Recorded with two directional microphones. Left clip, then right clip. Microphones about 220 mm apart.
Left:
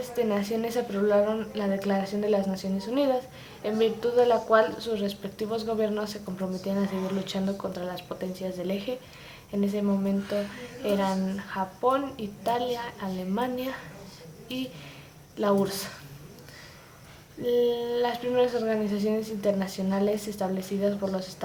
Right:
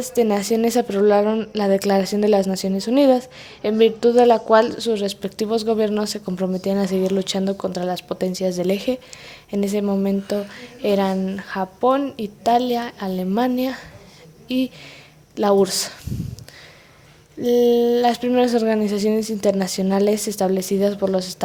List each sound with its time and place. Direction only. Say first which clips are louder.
0.0 s a woman's voice: right 8 dB; 45° right (ahead or behind)
17.4 s a woman's voice: right 9 dB; 45° right (ahead or behind)